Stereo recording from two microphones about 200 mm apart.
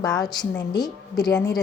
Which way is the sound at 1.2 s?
5° left (ahead or behind).